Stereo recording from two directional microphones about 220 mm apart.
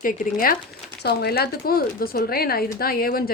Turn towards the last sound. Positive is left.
turn(degrees=40)  # may be behind; listen again after turning